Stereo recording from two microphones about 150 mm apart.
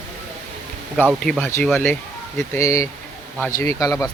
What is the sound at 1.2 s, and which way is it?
Speech, 10° left (ahead or behind).